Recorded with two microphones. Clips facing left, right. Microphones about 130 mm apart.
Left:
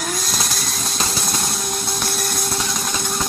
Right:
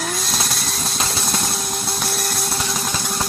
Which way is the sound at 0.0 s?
Centre (ahead or behind).